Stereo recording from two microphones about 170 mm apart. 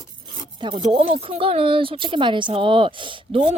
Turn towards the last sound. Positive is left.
turn(degrees=-30)  # may be behind; listen again after turning